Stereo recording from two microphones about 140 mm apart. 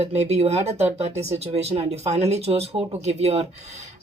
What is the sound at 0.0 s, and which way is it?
Speech, 50° right (ahead or behind).